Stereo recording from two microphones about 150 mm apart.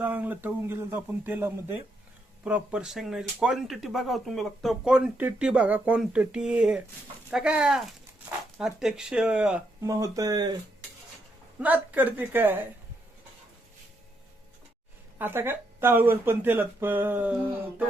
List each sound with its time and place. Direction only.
0.0 s speech: 10° right (ahead or behind)
9.8 s speech: 25° right (ahead or behind)
11.6 s speech: 10° right (ahead or behind)
15.2 s speech: 15° right (ahead or behind)